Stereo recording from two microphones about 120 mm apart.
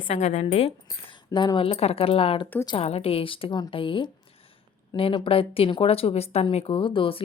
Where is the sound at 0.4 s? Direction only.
60° left (ahead or behind).